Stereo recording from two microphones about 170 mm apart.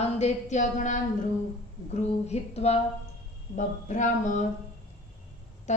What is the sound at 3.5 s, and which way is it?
Speech, 50° left (ahead or behind).